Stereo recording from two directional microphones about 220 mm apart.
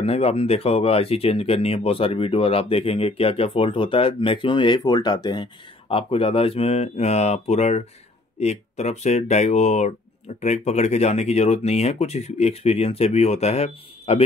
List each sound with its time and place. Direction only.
0.0 s speech: 25° left (ahead or behind)